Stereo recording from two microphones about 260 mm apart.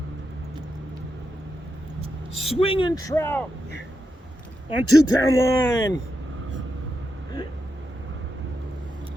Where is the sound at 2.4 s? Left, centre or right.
Left.